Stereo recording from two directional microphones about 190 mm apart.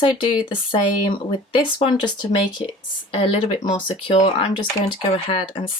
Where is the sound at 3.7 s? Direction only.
25° left (ahead or behind).